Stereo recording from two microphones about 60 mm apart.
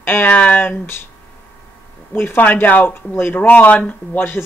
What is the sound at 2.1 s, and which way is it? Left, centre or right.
Speech, left.